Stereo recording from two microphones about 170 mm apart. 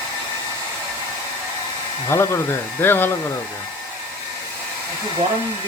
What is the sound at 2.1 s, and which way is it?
Speech, 15° left (ahead or behind).